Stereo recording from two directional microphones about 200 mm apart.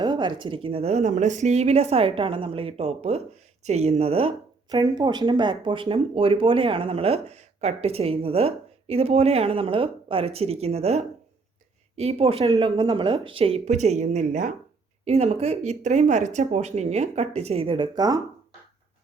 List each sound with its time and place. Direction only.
0.0 s speech: 20° right (ahead or behind)